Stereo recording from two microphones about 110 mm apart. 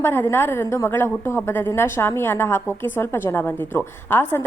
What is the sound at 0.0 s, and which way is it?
A woman's voice, 20° left (ahead or behind).